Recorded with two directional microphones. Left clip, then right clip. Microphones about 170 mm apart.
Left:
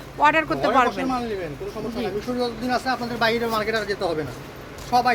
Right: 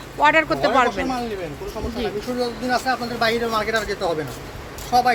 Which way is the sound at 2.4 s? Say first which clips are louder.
Right 3 dB; 20° left (ahead or behind).